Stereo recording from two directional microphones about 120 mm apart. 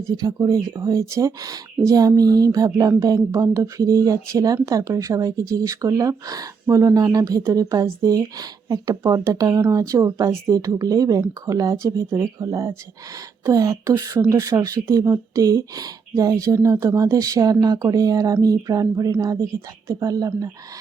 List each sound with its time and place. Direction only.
0.0 s speech: 30° right (ahead or behind)